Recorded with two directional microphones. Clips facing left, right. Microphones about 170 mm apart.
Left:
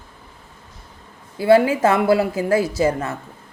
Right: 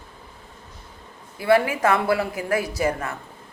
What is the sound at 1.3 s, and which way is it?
Speech, 30° left (ahead or behind).